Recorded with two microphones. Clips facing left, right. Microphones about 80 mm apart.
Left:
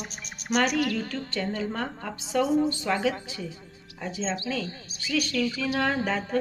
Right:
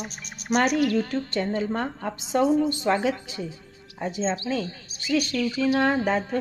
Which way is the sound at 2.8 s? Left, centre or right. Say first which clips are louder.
Right 3 dB; right.